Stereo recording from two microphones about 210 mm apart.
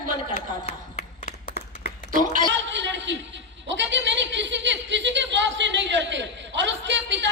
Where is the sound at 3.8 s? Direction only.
60° right (ahead or behind).